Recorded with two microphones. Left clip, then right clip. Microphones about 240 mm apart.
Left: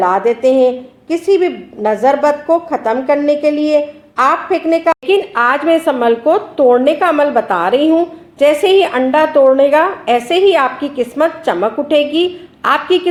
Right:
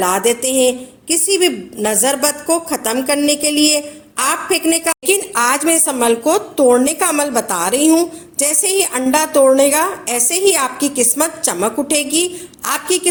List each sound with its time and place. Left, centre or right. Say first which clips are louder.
0.0 s a woman's voice: left 4 dB; right